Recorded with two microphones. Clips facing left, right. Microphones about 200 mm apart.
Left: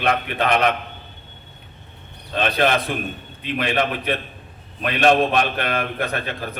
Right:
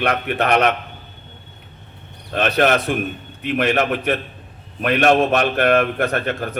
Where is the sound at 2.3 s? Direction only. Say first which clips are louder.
Right 3 dB; 45° right (ahead or behind).